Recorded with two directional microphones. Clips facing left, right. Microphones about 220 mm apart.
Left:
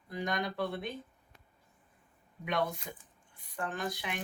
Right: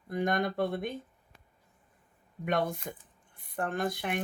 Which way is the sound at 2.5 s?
50° right (ahead or behind).